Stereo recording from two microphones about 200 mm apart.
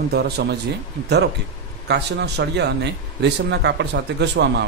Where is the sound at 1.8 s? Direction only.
55° right (ahead or behind).